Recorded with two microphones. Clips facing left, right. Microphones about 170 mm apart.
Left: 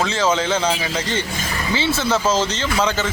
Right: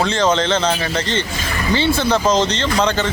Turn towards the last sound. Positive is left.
turn(degrees=5)  # may be behind; listen again after turning